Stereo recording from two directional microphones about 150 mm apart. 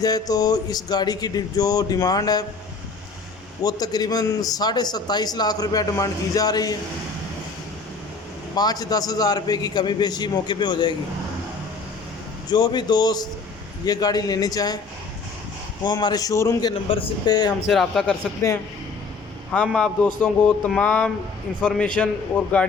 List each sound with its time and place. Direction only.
0.0 s a man's voice: 25° left (ahead or behind)
3.6 s a man's voice: 25° left (ahead or behind)
8.5 s a man's voice: 25° left (ahead or behind)
12.5 s a man's voice: 25° left (ahead or behind)
15.8 s a man's voice: 30° left (ahead or behind)
17.7 s speech: centre (ahead or behind)
19.6 s a sound: 5° left (ahead or behind)
22.0 s speech: 5° left (ahead or behind)
22.4 s a sound: 10° left (ahead or behind)